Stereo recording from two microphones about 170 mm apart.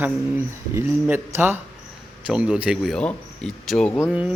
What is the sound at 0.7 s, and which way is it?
Speech, 15° right (ahead or behind).